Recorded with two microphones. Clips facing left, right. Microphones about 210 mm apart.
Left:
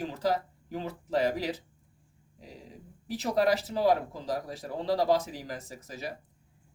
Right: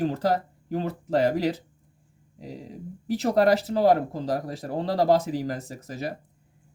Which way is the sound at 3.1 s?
55° right (ahead or behind).